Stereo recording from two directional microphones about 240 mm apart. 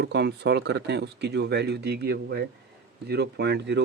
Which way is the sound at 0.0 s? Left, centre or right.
Right.